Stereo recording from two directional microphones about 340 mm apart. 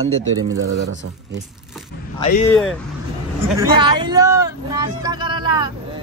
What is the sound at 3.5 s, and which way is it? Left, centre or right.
A man's voice, centre.